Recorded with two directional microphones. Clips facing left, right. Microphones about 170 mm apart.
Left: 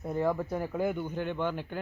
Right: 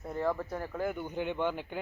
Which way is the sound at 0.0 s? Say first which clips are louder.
Left 3 dB; 10° left (ahead or behind).